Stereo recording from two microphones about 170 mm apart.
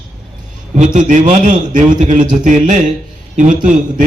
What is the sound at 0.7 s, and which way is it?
A man's voice, 50° right (ahead or behind).